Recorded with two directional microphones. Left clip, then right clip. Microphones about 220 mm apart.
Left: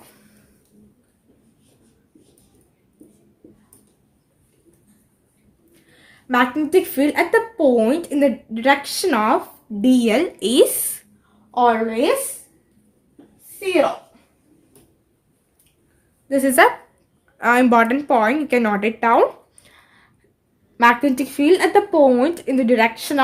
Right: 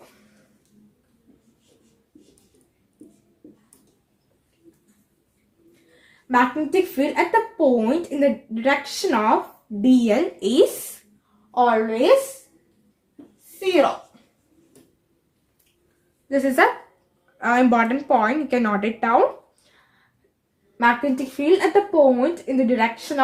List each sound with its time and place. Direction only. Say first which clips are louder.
6.2 s speech: left 1 dB; 45° left (ahead or behind)
11.5 s speech: left 2 dB; 50° left (ahead or behind)
16.3 s speech: left 4 dB; 50° left (ahead or behind)
17.3 s speech: left 4 dB; 35° left (ahead or behind)
20.7 s speech: left 4 dB; 45° left (ahead or behind)